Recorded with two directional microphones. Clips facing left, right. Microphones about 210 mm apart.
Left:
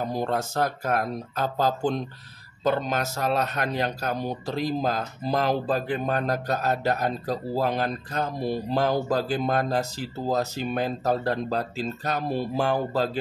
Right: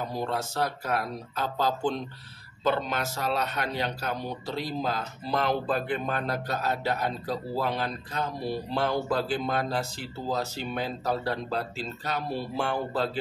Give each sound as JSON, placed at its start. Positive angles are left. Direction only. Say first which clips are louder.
{"t": 0.0, "sound": "speech", "louder": "left 4 dB", "side_deg": 45}